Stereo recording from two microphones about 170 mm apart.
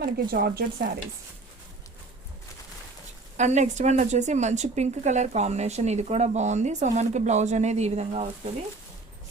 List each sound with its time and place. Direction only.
0.0 s speech: 60° right (ahead or behind)
3.3 s a woman's voice: 45° right (ahead or behind)